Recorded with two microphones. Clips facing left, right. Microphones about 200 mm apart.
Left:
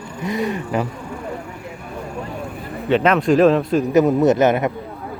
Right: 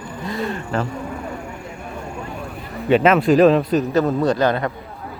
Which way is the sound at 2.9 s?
5° right (ahead or behind).